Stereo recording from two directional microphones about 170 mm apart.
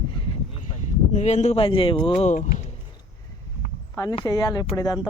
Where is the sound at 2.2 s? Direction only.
45° left (ahead or behind).